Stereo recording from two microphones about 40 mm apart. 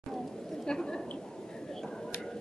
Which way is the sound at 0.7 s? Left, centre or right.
Centre.